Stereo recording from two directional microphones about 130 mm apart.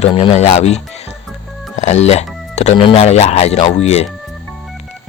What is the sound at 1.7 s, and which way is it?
Music, 60° left (ahead or behind).